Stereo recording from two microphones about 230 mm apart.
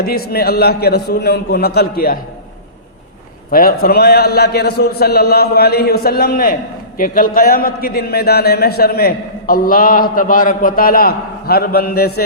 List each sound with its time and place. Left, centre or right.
0.0 s a man's voice: left
3.5 s a man's voice: left